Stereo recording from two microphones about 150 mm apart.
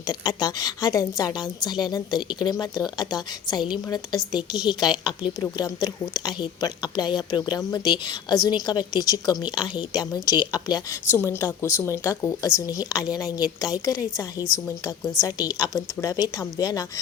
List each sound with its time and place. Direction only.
0.1 s a woman's voice: 25° left (ahead or behind)
11.1 s a woman's voice: 15° left (ahead or behind)
15.2 s a woman's voice: 25° left (ahead or behind)